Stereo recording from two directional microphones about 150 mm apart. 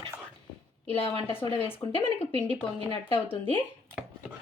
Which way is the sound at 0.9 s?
40° left (ahead or behind).